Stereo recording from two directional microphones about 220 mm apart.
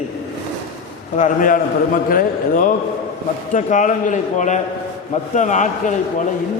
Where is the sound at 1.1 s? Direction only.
35° left (ahead or behind).